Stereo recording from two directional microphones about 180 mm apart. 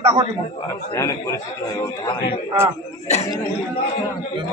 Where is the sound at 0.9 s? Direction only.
15° left (ahead or behind).